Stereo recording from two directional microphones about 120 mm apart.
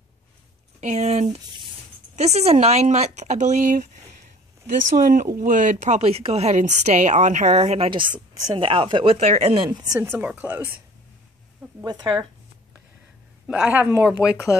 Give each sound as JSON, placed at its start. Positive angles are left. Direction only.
{"t": 0.7, "sound": "speech", "side_deg": -70}
{"t": 7.9, "sound": "a woman's voice", "side_deg": -45}
{"t": 9.7, "sound": "speech", "side_deg": -30}
{"t": 9.9, "sound": "speech", "side_deg": -20}
{"t": 11.8, "sound": "speech", "side_deg": -35}
{"t": 13.5, "sound": "speech", "side_deg": -10}